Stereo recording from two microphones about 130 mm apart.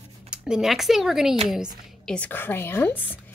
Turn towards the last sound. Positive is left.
turn(degrees=15)  # may be behind; listen again after turning